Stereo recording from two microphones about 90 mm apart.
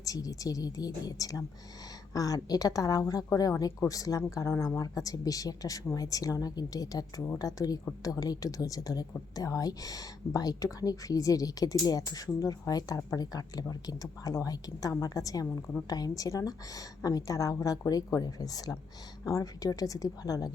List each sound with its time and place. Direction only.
0.0 s speech: 40° left (ahead or behind)